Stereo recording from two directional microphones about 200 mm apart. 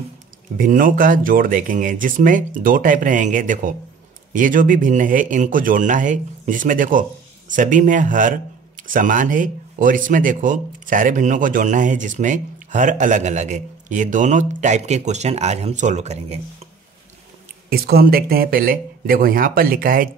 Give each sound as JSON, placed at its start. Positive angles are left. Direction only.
{"t": 0.6, "sound": "speech", "side_deg": -45}
{"t": 17.6, "sound": "speech", "side_deg": -50}